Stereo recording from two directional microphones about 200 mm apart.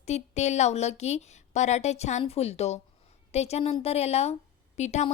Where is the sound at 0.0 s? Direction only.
35° left (ahead or behind).